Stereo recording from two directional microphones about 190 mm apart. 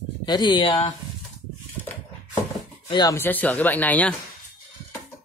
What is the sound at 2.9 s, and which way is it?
Speech, 25° left (ahead or behind).